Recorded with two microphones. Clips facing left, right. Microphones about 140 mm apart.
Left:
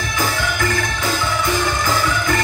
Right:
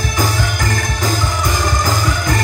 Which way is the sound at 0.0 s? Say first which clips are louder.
Right 2 dB; 40° right (ahead or behind).